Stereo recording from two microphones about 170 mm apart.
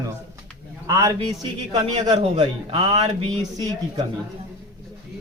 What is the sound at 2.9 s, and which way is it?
Speech, 25° right (ahead or behind).